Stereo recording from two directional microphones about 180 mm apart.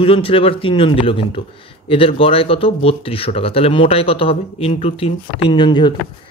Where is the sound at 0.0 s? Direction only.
30° left (ahead or behind).